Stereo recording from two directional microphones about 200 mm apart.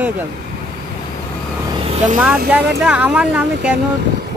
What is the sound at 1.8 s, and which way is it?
Vehicle, 35° right (ahead or behind).